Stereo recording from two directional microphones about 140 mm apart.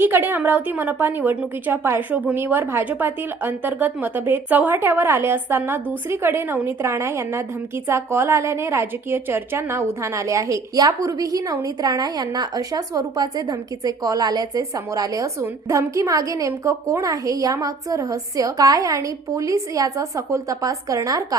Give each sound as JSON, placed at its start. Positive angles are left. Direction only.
{"t": 0.0, "sound": "a woman's voice", "side_deg": -15}